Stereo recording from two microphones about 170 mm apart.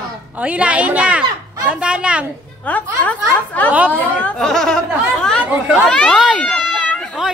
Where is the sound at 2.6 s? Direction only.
10° left (ahead or behind).